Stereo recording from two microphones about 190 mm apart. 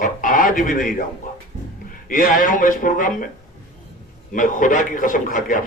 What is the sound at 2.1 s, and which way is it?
A man's voice, 45° left (ahead or behind).